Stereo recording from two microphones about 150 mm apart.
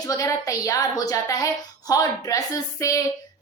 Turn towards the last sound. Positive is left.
turn(degrees=20)  # may be behind; listen again after turning